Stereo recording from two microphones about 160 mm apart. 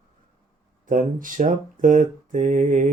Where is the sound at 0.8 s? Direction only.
55° right (ahead or behind).